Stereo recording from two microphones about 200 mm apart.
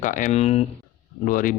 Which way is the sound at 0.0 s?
40° left (ahead or behind).